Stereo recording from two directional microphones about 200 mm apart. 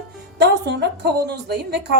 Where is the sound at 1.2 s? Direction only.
55° right (ahead or behind).